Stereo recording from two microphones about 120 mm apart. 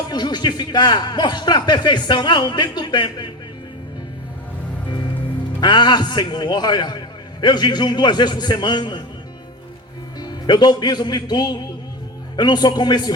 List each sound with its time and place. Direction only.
0.1 s speech: 35° left (ahead or behind)
5.5 s speech: 35° left (ahead or behind)
10.2 s a man's voice: 35° left (ahead or behind)